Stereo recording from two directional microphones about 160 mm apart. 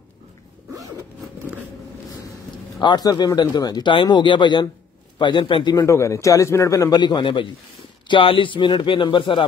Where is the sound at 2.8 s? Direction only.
25° left (ahead or behind).